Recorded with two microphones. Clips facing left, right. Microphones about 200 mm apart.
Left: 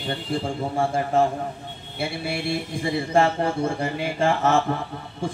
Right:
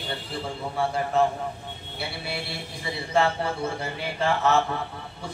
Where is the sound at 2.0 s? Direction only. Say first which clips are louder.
Left 6 dB; 50° left (ahead or behind).